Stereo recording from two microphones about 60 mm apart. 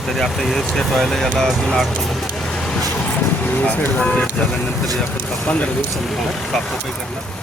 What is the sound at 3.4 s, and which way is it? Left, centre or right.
Speech, left.